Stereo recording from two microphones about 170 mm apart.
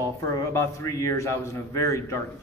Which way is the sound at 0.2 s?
15° left (ahead or behind).